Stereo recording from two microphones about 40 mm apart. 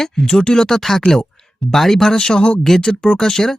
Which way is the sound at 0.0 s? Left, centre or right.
Centre.